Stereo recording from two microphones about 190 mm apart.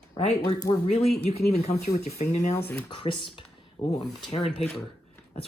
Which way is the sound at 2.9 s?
25° left (ahead or behind).